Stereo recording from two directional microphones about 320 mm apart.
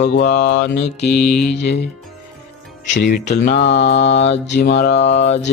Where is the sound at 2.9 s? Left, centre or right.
Left.